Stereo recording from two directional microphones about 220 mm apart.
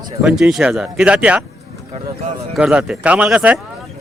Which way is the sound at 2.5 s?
5° right (ahead or behind).